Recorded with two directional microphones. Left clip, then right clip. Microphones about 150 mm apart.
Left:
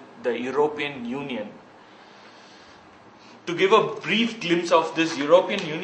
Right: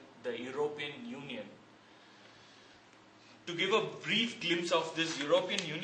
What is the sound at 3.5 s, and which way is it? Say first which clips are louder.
A man's voice: left 13 dB; 15° right (ahead or behind).